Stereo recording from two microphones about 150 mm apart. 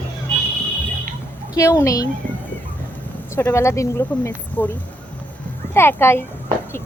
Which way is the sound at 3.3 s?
15° left (ahead or behind).